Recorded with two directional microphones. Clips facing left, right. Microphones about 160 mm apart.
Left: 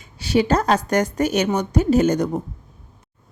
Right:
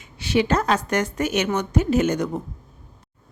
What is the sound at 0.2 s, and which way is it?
A woman's voice, 35° left (ahead or behind).